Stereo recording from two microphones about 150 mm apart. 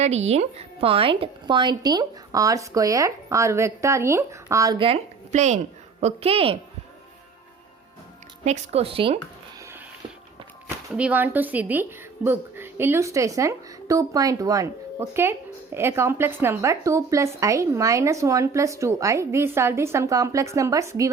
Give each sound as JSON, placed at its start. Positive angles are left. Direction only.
{"t": 0.0, "sound": "a woman's voice", "side_deg": -45}
{"t": 4.8, "sound": "a woman's voice", "side_deg": -45}
{"t": 8.4, "sound": "speech", "side_deg": -45}
{"t": 10.9, "sound": "a woman's voice", "side_deg": -10}